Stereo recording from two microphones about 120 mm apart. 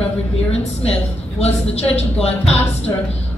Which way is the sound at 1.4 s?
60° left (ahead or behind).